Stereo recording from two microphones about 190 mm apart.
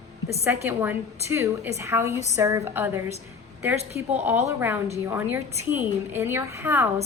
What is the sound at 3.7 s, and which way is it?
Speech, 35° right (ahead or behind).